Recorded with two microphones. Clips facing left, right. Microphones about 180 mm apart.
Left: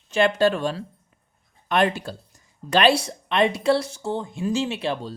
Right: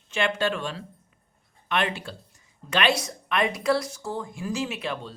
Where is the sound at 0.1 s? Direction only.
40° left (ahead or behind).